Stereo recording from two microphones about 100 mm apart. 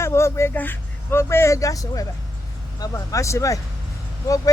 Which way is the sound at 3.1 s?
30° left (ahead or behind).